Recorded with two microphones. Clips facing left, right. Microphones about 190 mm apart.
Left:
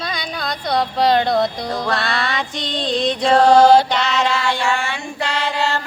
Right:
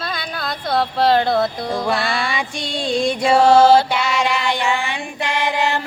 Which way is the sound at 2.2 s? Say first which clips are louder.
Even; 10° right (ahead or behind).